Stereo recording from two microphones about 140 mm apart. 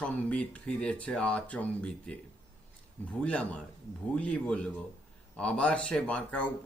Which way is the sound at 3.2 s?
10° left (ahead or behind).